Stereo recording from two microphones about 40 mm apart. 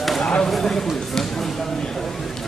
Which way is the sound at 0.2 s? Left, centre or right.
Left.